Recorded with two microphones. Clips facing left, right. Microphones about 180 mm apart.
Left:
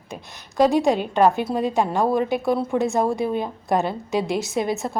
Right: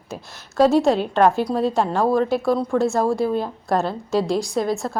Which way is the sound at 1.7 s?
15° left (ahead or behind).